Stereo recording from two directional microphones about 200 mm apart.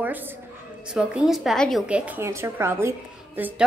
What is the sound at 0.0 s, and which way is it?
A woman's voice, 10° right (ahead or behind).